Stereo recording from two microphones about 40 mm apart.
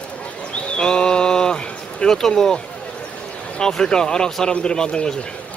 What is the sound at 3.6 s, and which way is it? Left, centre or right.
Speech, centre.